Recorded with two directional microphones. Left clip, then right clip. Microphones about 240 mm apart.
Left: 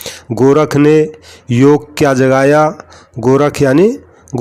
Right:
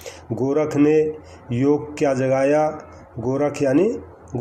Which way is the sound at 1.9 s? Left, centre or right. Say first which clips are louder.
Left 9 dB; left.